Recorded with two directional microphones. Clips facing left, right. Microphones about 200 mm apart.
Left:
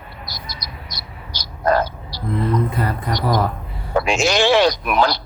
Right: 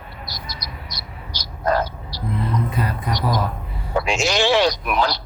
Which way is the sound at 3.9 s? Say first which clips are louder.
Left 3 dB; 55° left (ahead or behind).